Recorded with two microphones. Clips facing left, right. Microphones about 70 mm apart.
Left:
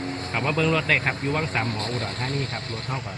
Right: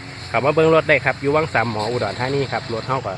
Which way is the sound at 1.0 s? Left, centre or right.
Right.